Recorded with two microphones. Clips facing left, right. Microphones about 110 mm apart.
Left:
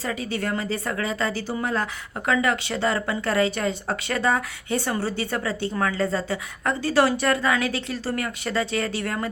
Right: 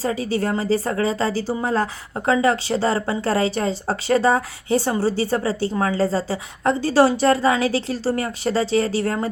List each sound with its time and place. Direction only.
0.0 s a woman's voice: 30° right (ahead or behind)